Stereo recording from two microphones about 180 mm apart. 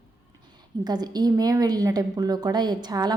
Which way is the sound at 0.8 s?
25° right (ahead or behind).